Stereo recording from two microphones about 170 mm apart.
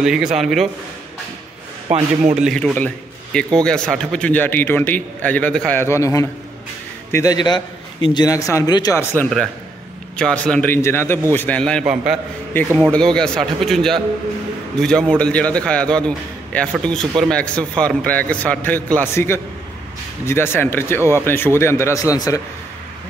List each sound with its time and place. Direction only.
0.0 s speech: 5° right (ahead or behind)
1.9 s a man's voice: 40° right (ahead or behind)
2.3 s a man's voice: centre (ahead or behind); by 9.0 s 25° left (ahead or behind)
10.1 s a man's voice: 5° left (ahead or behind)
11.8 s a man's voice: 5° right (ahead or behind); by 22.4 s 20° left (ahead or behind)